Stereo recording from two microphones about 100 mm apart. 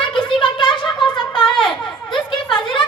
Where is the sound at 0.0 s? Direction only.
55° left (ahead or behind).